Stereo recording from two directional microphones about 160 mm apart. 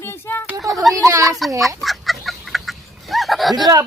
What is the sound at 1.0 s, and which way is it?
Speech, 20° right (ahead or behind).